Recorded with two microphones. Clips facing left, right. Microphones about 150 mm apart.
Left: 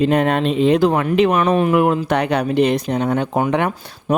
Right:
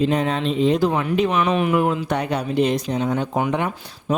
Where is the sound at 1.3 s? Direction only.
45° left (ahead or behind).